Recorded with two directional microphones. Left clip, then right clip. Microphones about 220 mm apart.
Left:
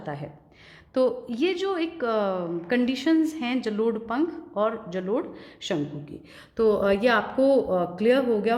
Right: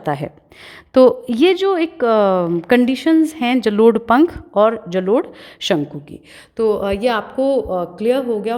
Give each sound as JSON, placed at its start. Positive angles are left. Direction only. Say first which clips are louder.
{"t": 0.0, "sound": "a woman's voice", "louder": "right 13 dB", "side_deg": -50}
{"t": 6.6, "sound": "speech", "louder": "right 4 dB", "side_deg": -30}